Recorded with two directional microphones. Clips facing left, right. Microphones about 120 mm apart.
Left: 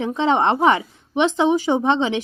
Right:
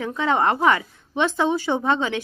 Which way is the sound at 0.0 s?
20° left (ahead or behind).